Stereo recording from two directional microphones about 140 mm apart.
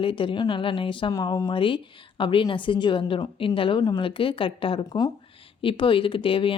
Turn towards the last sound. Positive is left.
turn(degrees=40)  # may be behind; listen again after turning